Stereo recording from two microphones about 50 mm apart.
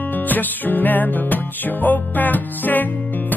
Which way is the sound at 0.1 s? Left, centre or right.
Left.